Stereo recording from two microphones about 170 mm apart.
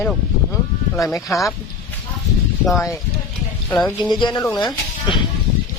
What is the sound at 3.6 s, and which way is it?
Speech, 10° left (ahead or behind).